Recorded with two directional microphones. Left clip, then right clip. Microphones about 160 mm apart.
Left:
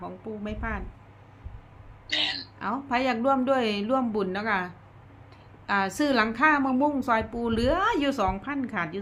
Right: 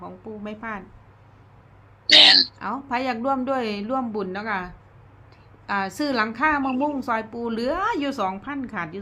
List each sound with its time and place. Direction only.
0.0 s a woman's voice: 5° right (ahead or behind)
2.0 s speech: 90° right
2.6 s a woman's voice: 10° right (ahead or behind)